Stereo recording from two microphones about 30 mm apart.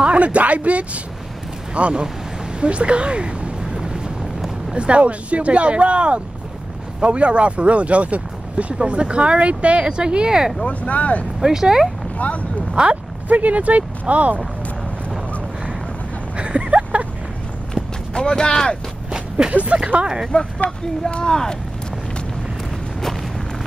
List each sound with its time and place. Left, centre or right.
0.0 s speech: right
2.6 s a sound: right
4.7 s speech: right
8.7 s speech: right
10.7 s speech: left
11.4 s speech: centre
12.8 s speech: right
13.3 s speech: right
16.3 s a sound: right
18.1 s speech: left
19.4 s speech: right
20.2 s speech: left